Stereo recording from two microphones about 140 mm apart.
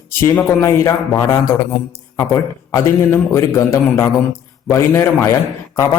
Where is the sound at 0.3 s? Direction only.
20° left (ahead or behind).